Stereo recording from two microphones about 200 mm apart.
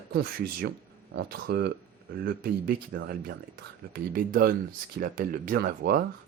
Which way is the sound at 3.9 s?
45° right (ahead or behind).